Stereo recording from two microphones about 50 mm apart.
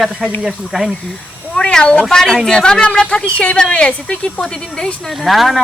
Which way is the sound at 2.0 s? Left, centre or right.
Centre.